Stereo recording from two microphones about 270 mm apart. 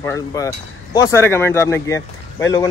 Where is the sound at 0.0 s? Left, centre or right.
Centre.